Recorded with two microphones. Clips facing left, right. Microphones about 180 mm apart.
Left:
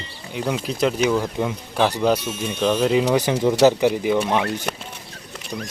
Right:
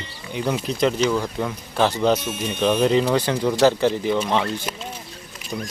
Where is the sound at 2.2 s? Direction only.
55° right (ahead or behind).